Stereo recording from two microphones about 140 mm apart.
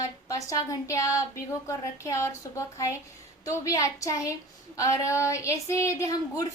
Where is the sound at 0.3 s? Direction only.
25° left (ahead or behind).